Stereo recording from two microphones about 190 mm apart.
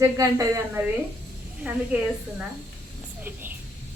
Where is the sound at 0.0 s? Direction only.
15° right (ahead or behind).